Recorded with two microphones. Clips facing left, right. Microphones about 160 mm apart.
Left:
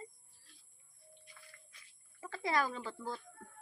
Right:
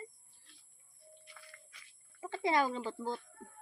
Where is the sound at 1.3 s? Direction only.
85° right.